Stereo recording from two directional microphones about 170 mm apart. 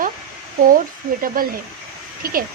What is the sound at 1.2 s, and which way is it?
Speech, 60° right (ahead or behind).